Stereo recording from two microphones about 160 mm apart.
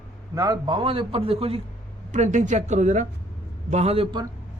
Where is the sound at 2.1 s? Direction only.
50° right (ahead or behind); by 4.3 s 30° right (ahead or behind).